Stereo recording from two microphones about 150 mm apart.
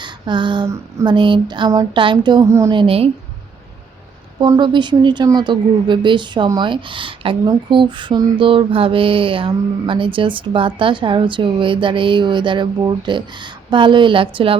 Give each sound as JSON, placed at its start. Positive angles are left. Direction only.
{"t": 0.0, "sound": "a sound", "side_deg": -30}
{"t": 0.7, "sound": "a woman's voice", "side_deg": -20}
{"t": 1.1, "sound": "a woman's voice", "side_deg": -30}
{"t": 2.7, "sound": "speech", "side_deg": -40}
{"t": 4.4, "sound": "speech", "side_deg": -30}